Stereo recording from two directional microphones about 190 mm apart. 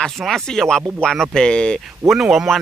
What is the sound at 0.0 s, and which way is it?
Speech, 5° left (ahead or behind).